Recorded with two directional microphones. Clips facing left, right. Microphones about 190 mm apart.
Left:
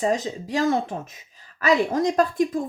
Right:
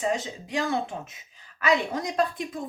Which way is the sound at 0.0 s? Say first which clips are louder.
Left 4 dB; 40° left (ahead or behind).